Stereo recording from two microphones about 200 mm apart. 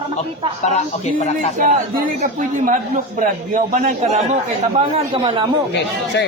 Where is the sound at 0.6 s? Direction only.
35° left (ahead or behind).